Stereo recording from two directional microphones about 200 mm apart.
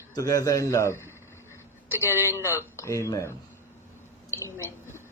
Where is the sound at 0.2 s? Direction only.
15° left (ahead or behind).